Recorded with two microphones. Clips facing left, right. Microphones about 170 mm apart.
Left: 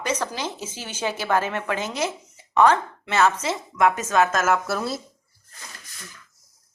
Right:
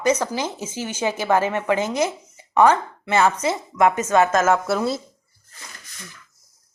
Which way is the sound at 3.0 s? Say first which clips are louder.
Right 2 dB; 10° right (ahead or behind).